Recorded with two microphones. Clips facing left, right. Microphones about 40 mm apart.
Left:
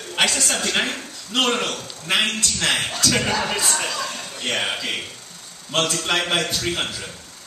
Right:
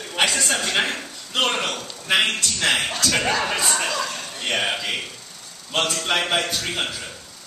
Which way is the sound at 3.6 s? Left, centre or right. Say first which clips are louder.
Right 1 dB; centre.